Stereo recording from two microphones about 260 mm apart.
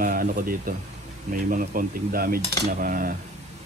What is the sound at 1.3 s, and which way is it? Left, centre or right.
Speech, right.